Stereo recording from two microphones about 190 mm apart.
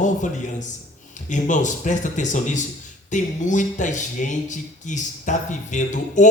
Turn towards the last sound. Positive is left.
turn(degrees=40)  # may be behind; listen again after turning